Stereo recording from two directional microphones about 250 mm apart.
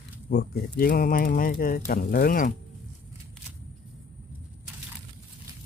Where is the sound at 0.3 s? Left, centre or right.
Left.